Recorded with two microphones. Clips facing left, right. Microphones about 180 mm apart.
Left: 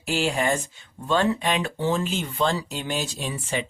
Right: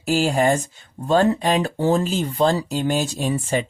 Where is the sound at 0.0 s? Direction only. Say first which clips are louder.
Right 6 dB; 40° right (ahead or behind).